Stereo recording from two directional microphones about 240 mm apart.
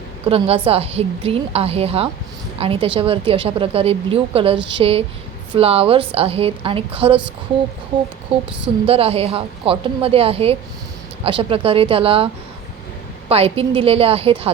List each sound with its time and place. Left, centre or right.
0.3 s a woman's voice: right
8.9 s a woman's voice: right